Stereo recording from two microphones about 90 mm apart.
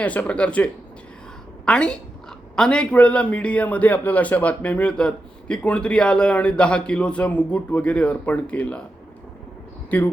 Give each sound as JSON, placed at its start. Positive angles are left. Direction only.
{"t": 0.0, "sound": "a man's voice", "side_deg": 15}
{"t": 9.9, "sound": "speech", "side_deg": 20}